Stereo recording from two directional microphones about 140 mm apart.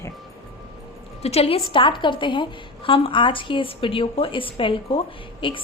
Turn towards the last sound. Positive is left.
turn(degrees=35)  # may be behind; listen again after turning